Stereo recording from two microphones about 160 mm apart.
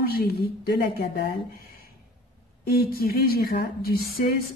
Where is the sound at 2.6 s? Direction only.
70° left (ahead or behind).